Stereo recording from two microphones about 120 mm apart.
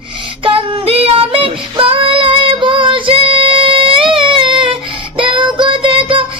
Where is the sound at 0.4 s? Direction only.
50° right (ahead or behind).